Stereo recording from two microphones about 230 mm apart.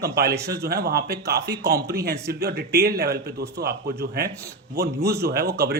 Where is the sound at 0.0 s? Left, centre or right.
Right.